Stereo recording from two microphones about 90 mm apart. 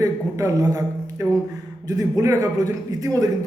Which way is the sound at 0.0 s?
30° right (ahead or behind).